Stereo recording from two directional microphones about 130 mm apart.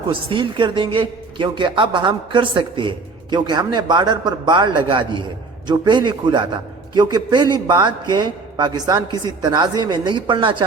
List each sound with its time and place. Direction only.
0.1 s a man's voice: 40° right (ahead or behind)